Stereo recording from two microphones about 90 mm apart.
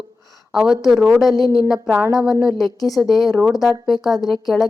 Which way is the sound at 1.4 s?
45° left (ahead or behind).